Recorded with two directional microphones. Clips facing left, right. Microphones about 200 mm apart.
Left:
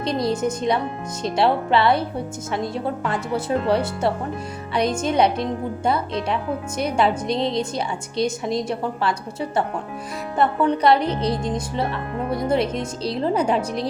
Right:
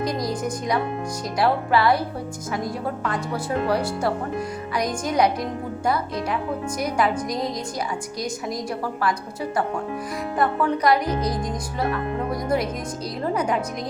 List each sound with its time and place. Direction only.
0.0 s speech: 25° left (ahead or behind)